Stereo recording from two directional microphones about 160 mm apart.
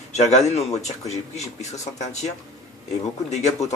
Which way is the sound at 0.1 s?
45° left (ahead or behind).